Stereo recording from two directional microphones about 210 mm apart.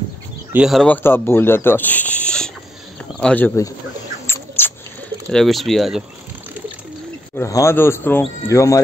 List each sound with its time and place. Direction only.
0.5 s speech: 5° right (ahead or behind); by 3.7 s 10° left (ahead or behind)
4.3 s mouse: 10° left (ahead or behind)
5.3 s speech: centre (ahead or behind)
7.3 s speech: 15° left (ahead or behind)